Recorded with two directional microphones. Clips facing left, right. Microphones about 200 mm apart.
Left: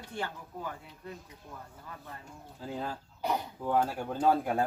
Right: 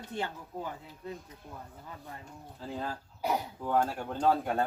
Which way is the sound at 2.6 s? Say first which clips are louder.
Even; centre (ahead or behind).